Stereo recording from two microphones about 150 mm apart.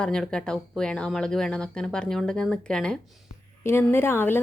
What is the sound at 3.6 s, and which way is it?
Speech, 15° left (ahead or behind).